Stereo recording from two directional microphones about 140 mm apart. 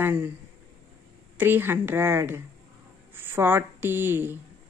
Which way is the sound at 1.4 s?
15° right (ahead or behind).